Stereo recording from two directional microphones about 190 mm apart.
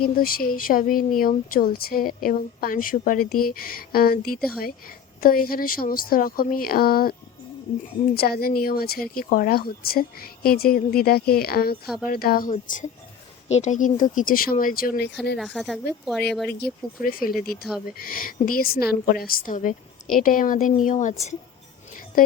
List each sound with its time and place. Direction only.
0.0 s speech: 50° left (ahead or behind)
15.4 s a woman's voice: centre (ahead or behind)
16.6 s speech: 55° left (ahead or behind)